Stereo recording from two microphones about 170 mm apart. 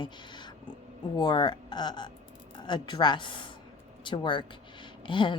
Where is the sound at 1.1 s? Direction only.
25° left (ahead or behind).